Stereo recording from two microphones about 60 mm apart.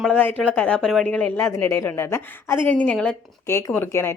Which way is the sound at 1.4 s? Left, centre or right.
Left.